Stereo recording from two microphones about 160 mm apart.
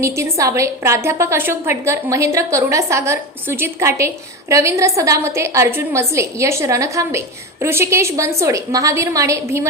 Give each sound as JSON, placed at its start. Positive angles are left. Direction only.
{"t": 0.0, "sound": "a woman's voice", "side_deg": -20}